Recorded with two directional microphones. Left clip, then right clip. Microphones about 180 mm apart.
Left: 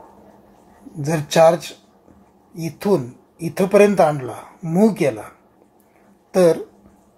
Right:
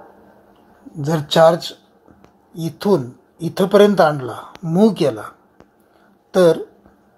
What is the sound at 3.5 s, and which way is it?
Speech, centre (ahead or behind).